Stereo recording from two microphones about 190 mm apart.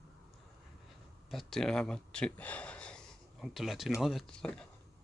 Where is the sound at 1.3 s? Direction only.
Centre (ahead or behind).